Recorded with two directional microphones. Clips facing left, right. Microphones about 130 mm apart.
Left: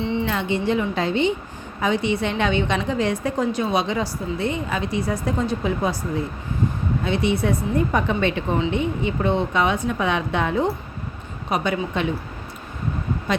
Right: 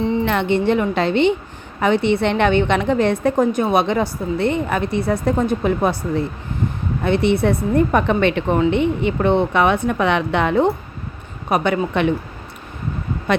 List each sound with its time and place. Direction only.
0.0 s a sound: 40° right (ahead or behind)
0.3 s a woman's voice: 65° right (ahead or behind)
7.0 s a woman's voice: 60° right (ahead or behind)